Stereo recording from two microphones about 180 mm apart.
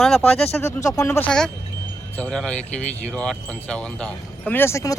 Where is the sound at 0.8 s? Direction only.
15° left (ahead or behind).